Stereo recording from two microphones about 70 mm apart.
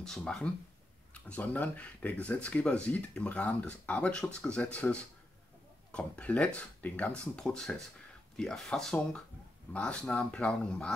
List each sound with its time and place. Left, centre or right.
0.0 s speech: centre
1.1 s speech: left